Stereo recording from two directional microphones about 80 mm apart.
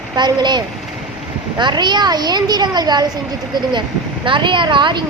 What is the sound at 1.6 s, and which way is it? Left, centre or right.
Speech, right.